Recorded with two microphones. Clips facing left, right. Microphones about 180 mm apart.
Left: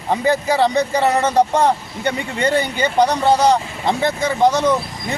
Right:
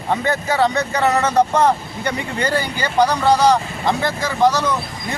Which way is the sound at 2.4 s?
25° left (ahead or behind).